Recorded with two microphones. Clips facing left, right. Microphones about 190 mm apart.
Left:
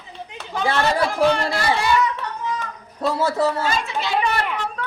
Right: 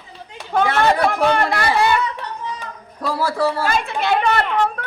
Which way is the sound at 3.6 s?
60° right (ahead or behind).